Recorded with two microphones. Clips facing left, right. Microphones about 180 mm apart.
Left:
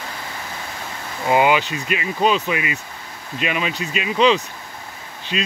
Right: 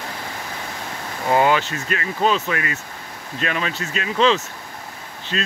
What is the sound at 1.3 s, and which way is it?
Speech, 15° left (ahead or behind).